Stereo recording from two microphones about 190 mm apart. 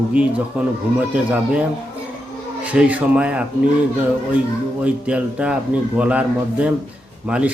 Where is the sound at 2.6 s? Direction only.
5° right (ahead or behind).